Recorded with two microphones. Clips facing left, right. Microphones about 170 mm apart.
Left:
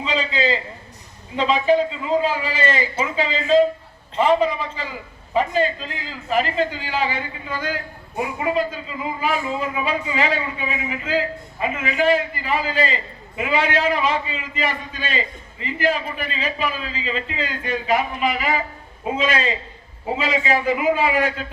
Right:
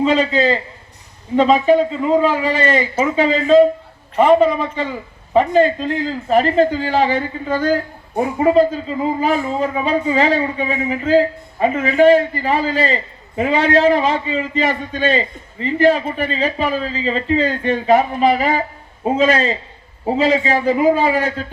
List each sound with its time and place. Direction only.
0.0 s a man's voice: 45° right (ahead or behind)